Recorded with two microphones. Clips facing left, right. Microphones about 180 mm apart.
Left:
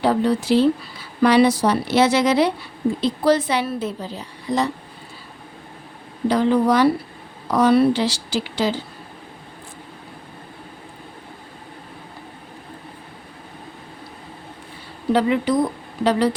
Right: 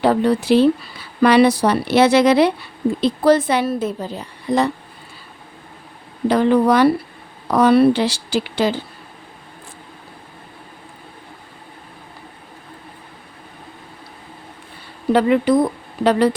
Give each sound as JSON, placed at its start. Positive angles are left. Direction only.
{"t": 0.0, "sound": "a woman's voice", "side_deg": -60}
{"t": 6.2, "sound": "speech", "side_deg": -60}
{"t": 15.1, "sound": "speech", "side_deg": -60}